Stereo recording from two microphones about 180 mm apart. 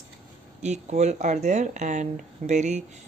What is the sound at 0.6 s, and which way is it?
Speech, 40° right (ahead or behind).